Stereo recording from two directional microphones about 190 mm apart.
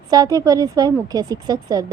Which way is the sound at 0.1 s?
20° right (ahead or behind).